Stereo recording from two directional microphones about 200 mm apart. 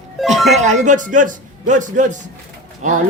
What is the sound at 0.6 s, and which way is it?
A woman's voice, 40° right (ahead or behind).